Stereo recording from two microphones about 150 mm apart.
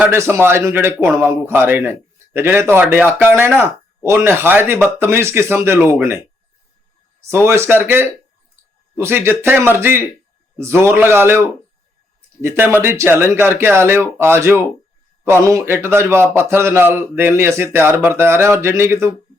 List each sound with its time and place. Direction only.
0.0 s speech: 15° right (ahead or behind)
7.2 s speech: 15° right (ahead or behind)